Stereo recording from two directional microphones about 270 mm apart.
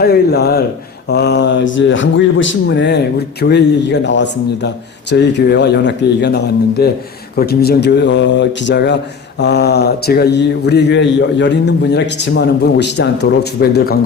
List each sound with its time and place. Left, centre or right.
0.0 s speech: left